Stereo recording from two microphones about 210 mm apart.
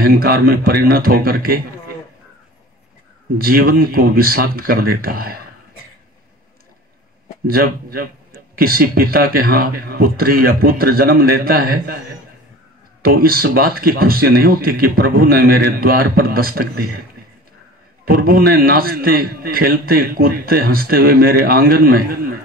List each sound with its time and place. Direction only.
0.0 s a man's voice: 45° right (ahead or behind)
3.3 s a man's voice: 45° right (ahead or behind)
7.4 s a man's voice: 45° right (ahead or behind)
13.0 s a man's voice: 45° right (ahead or behind)
18.0 s a man's voice: 45° right (ahead or behind)